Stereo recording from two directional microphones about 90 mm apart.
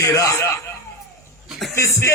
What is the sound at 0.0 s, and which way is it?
Speech, 40° left (ahead or behind).